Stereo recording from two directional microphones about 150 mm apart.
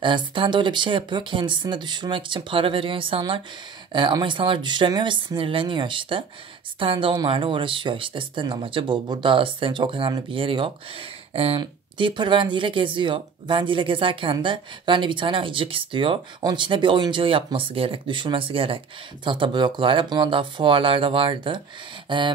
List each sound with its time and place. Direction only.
0.0 s speech: 35° right (ahead or behind)